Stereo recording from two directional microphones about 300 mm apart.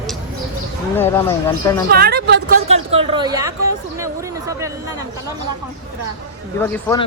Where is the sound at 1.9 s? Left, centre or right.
Right.